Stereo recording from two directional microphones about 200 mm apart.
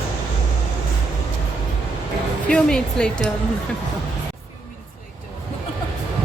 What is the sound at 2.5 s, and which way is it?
Speech, 5° left (ahead or behind).